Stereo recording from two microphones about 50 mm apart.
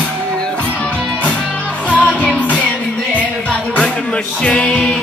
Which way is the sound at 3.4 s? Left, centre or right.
Left.